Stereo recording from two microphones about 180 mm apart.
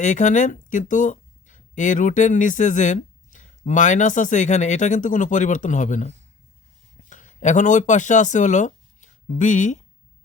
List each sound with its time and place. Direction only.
0.0 s speech: 45° left (ahead or behind)
7.1 s speech: 45° left (ahead or behind)